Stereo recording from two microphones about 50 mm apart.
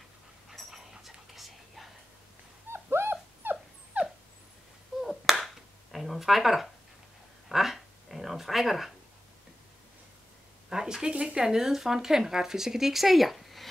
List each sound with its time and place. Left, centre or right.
0.5 s dog: centre
2.7 s dog: right
3.4 s dog: right
3.9 s dog: right
4.9 s finger snapping: centre
7.4 s a sound: centre
10.7 s speech: centre